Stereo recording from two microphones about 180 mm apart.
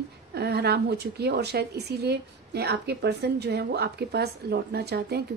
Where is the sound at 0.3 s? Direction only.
65° right (ahead or behind).